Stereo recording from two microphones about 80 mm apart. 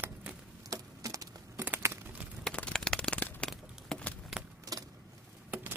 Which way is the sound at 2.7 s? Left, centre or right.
Centre.